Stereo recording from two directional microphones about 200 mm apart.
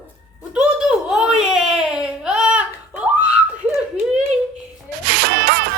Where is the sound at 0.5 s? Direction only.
5° right (ahead or behind).